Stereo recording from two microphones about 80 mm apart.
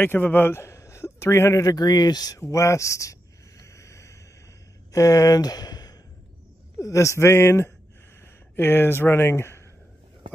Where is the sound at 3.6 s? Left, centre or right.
Left.